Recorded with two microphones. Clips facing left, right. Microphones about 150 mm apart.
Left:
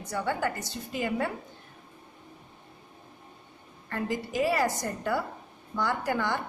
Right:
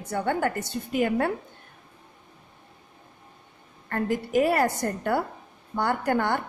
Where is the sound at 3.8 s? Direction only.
55° right (ahead or behind).